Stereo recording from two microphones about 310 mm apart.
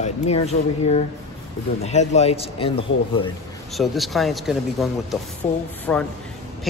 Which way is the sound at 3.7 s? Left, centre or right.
Centre.